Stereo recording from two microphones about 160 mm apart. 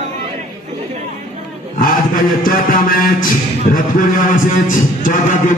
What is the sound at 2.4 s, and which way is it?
Chant, 60° left (ahead or behind).